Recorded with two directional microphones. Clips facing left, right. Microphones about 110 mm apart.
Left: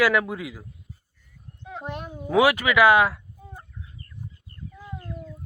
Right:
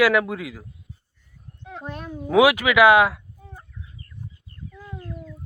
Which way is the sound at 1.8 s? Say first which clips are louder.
Right 1 dB; 20° left (ahead or behind).